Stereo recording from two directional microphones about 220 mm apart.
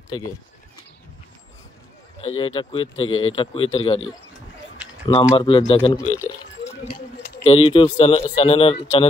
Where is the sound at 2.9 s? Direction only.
65° left (ahead or behind).